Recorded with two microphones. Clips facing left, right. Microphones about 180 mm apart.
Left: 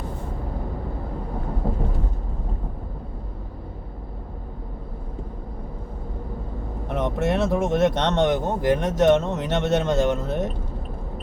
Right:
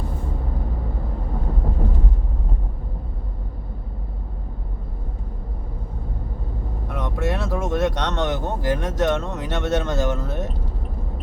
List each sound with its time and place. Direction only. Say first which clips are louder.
6.8 s speech: left 3 dB; 20° left (ahead or behind)